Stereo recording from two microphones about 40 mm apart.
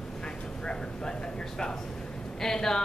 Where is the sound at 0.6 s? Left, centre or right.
Centre.